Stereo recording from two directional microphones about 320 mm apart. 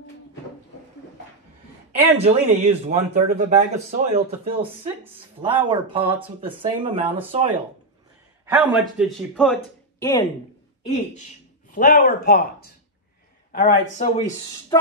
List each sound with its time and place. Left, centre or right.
1.9 s speech: centre
5.0 s speech: centre
8.5 s a man's voice: centre
10.8 s speech: left